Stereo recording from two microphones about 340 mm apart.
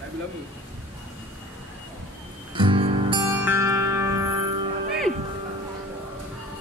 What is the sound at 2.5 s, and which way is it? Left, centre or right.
Music, centre.